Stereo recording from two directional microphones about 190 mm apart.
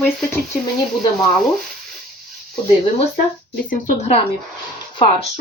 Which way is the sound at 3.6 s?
40° left (ahead or behind).